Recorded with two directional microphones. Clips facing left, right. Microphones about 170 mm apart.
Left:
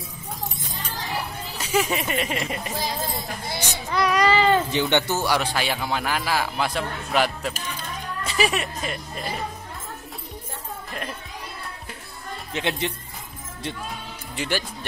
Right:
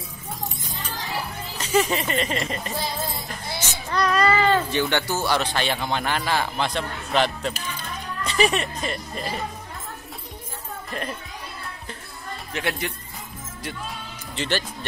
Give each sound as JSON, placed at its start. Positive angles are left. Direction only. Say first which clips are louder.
{"t": 1.6, "sound": "speech", "louder": "right 2 dB", "side_deg": 5}
{"t": 12.5, "sound": "speech", "louder": "left 2 dB", "side_deg": 25}
{"t": 14.3, "sound": "speech", "louder": "right 1 dB", "side_deg": 10}